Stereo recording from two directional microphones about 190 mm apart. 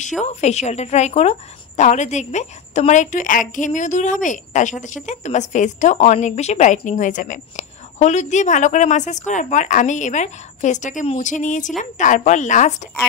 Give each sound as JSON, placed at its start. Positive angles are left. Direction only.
{"t": 0.2, "sound": "a woman's voice", "side_deg": 35}